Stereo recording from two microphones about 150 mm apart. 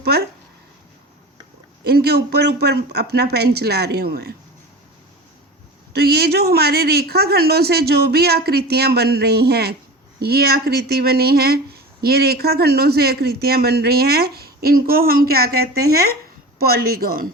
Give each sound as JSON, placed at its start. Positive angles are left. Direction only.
{"t": 1.8, "sound": "speech", "side_deg": -90}
{"t": 5.9, "sound": "speech", "side_deg": -90}